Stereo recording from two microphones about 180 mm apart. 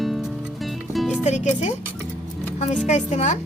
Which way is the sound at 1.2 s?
40° left (ahead or behind).